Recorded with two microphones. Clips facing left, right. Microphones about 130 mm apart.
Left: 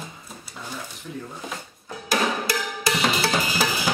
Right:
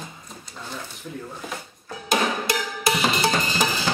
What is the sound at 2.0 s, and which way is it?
Percussion, 20° right (ahead or behind).